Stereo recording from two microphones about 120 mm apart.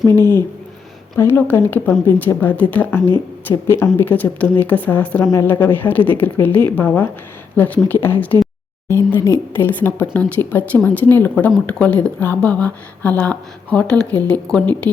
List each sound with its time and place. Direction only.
1.2 s a woman's voice: 15° left (ahead or behind)